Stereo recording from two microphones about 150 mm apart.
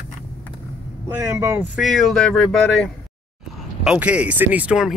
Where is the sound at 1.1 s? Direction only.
15° right (ahead or behind).